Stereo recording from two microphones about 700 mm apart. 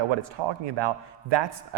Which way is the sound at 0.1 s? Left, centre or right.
Right.